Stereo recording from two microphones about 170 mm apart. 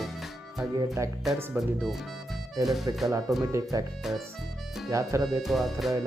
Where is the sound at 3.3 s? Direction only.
20° right (ahead or behind).